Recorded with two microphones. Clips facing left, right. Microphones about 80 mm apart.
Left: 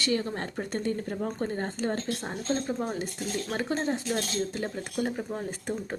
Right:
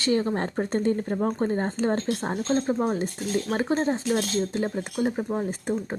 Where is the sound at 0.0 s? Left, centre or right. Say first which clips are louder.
Right 5 dB; right.